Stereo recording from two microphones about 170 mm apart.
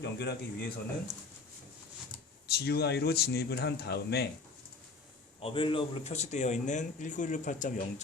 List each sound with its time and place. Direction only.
0.0 s a man's voice: 80° left
2.5 s speech: 70° left (ahead or behind)
5.4 s a man's voice: 30° left (ahead or behind); by 8.0 s 45° left (ahead or behind)